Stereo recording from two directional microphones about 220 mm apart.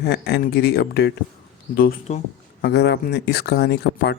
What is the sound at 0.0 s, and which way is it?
Speech, 45° left (ahead or behind).